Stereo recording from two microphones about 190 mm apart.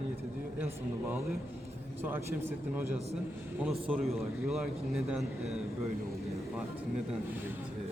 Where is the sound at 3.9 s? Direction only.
Centre (ahead or behind).